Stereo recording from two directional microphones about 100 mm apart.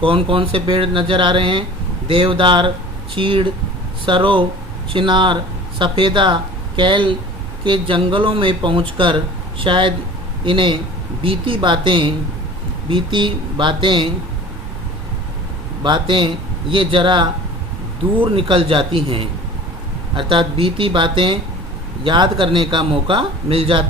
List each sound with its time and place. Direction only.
0.0 s speech: 60° right (ahead or behind)
15.8 s speech: 55° right (ahead or behind); by 23.8 s 70° right (ahead or behind)